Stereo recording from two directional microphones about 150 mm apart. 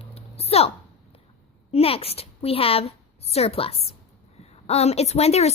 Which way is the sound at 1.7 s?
40° left (ahead or behind).